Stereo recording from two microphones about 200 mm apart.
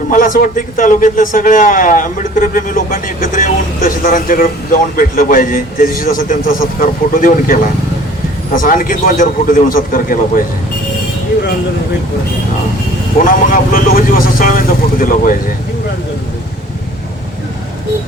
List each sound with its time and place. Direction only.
0.1 s a man's voice: 45° left (ahead or behind)
13.1 s a man's voice: 45° left (ahead or behind)